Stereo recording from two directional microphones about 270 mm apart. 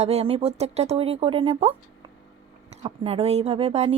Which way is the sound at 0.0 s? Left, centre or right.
Right.